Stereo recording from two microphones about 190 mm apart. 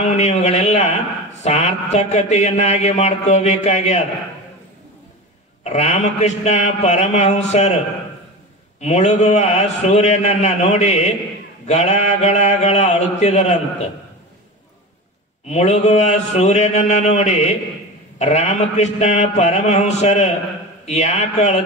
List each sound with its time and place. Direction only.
0.0 s a man's voice: 35° left (ahead or behind)
5.6 s a man's voice: 35° left (ahead or behind)
8.8 s a man's voice: 35° left (ahead or behind)
15.5 s a man's voice: 35° left (ahead or behind)